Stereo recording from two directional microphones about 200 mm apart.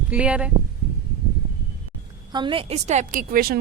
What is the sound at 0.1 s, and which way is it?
Speech, 5° right (ahead or behind).